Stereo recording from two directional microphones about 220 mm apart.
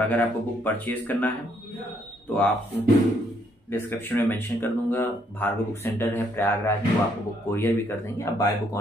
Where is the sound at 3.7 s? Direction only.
10° left (ahead or behind).